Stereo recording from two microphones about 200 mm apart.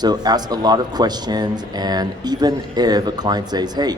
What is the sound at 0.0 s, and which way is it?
Speech, 20° right (ahead or behind).